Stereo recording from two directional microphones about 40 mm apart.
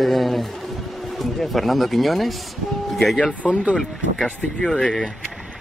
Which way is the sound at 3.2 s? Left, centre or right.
Left.